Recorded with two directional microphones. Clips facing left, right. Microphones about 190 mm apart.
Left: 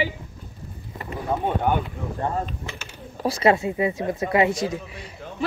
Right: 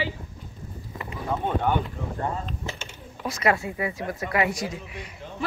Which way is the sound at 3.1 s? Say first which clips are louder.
Left 5 dB; 30° left (ahead or behind).